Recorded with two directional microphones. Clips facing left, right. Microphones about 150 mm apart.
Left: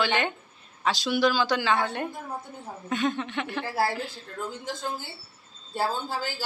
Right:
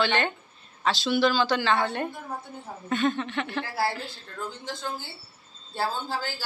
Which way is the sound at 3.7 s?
45° left (ahead or behind).